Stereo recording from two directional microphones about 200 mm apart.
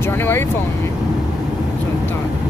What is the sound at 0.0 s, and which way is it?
Speech, 10° left (ahead or behind).